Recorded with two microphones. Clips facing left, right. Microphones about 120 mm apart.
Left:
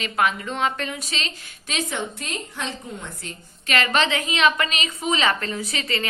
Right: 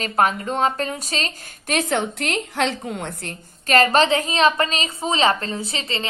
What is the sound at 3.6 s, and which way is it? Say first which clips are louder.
A woman's voice: right 6 dB; 40° right (ahead or behind).